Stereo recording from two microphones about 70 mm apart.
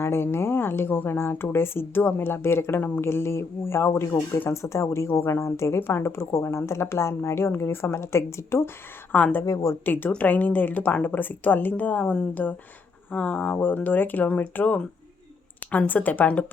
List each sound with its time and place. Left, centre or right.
0.0 s speech: left
9.1 s speech: centre
15.9 s speech: left